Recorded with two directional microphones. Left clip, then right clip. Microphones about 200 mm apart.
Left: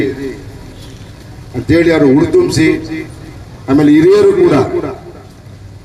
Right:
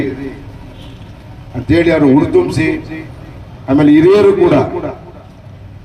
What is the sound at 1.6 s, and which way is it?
A man's voice, 40° right (ahead or behind).